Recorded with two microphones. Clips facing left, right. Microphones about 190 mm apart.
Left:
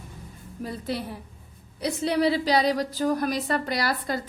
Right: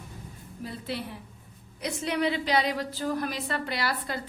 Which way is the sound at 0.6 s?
40° left (ahead or behind).